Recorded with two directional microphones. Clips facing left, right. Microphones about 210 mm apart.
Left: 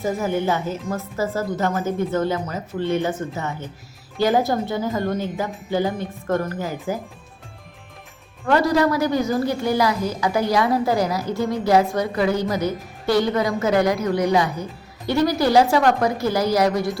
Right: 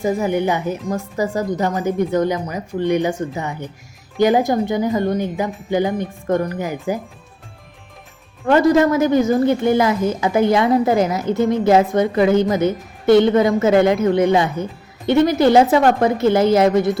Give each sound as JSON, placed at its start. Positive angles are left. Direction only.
{"t": 0.0, "sound": "speech", "side_deg": -15}
{"t": 8.4, "sound": "a woman's voice", "side_deg": -20}